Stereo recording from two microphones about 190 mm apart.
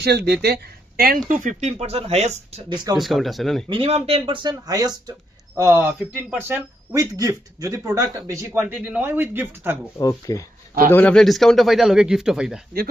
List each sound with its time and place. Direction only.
0.0 s speech: 60° right (ahead or behind)
1.3 s speech: 40° right (ahead or behind); by 3.0 s 25° right (ahead or behind)
3.0 s speech: centre (ahead or behind)
3.7 s speech: 30° right (ahead or behind)
8.5 s speech: 5° right (ahead or behind)
10.0 s speech: 15° left (ahead or behind)
10.9 s speech: 5° left (ahead or behind)